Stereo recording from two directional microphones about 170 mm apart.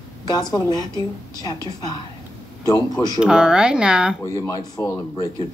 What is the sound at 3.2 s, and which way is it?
Speech, 5° right (ahead or behind).